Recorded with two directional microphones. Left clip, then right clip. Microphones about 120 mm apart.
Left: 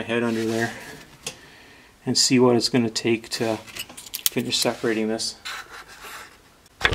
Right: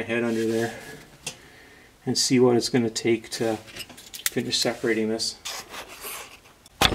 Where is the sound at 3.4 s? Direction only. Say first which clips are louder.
Left 1 dB; 20° left (ahead or behind).